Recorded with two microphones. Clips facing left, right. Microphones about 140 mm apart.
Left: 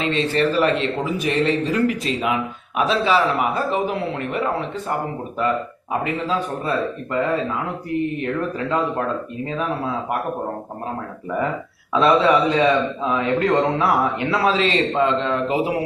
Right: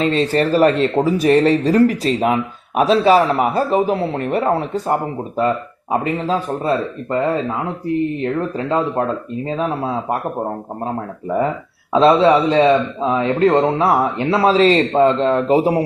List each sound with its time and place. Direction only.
0.0 s speech: 40° right (ahead or behind)
11.9 s speech: 30° right (ahead or behind)